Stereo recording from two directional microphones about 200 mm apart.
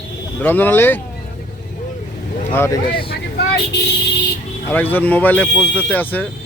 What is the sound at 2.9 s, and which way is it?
Vehicle, 50° left (ahead or behind).